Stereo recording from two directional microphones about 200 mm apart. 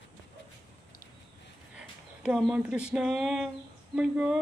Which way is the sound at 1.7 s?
5° right (ahead or behind).